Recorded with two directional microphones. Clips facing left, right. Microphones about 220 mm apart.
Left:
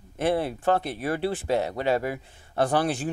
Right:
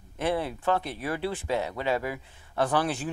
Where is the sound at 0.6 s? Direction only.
45° left (ahead or behind).